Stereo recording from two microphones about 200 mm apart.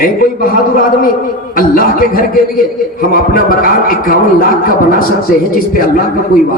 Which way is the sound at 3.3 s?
45° left (ahead or behind).